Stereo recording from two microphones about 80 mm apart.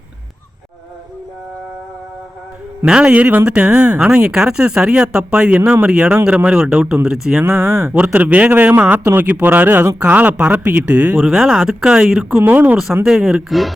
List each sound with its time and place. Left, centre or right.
2.8 s speech: centre
7.4 s speech: right
7.9 s a man's voice: centre
11.2 s speech: centre
12.4 s a man's voice: right
13.1 s speech: centre